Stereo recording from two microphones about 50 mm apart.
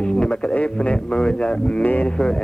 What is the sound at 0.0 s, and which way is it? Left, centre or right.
Speech, centre.